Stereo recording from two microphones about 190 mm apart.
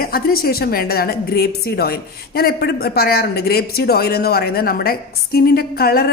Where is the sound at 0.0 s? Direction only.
50° left (ahead or behind).